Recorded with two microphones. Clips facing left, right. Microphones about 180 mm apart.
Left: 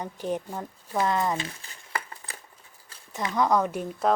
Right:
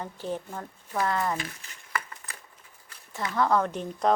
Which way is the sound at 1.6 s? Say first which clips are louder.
Even; 30° left (ahead or behind).